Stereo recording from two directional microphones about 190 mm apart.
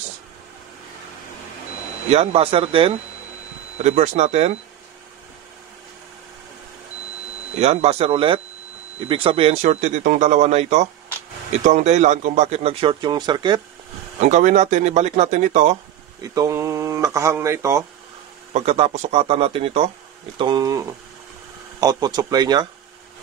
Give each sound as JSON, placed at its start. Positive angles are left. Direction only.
{"t": 2.0, "sound": "a man's voice", "side_deg": -30}
{"t": 7.5, "sound": "a man's voice", "side_deg": -35}
{"t": 14.2, "sound": "a man's voice", "side_deg": -40}
{"t": 16.2, "sound": "speech", "side_deg": -15}
{"t": 18.5, "sound": "a man's voice", "side_deg": -35}